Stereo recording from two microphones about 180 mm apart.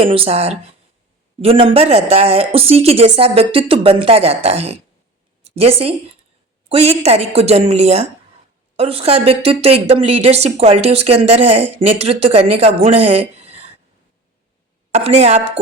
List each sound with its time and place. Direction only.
0.0 s a woman's voice: 30° right (ahead or behind)
14.9 s speech: 35° right (ahead or behind)